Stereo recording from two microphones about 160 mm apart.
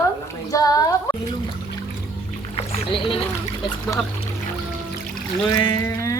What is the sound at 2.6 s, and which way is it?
Speech, 35° left (ahead or behind).